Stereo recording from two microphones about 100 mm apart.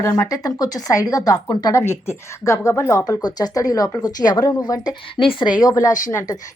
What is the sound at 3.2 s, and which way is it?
Speech, 40° left (ahead or behind).